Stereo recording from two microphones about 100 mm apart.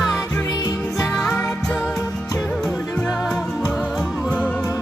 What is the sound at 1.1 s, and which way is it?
Music, 5° left (ahead or behind).